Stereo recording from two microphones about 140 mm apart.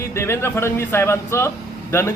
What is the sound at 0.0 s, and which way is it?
A woman's voice, 20° left (ahead or behind).